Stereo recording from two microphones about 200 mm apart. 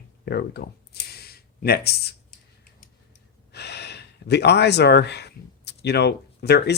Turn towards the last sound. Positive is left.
turn(degrees=55)  # may be behind; listen again after turning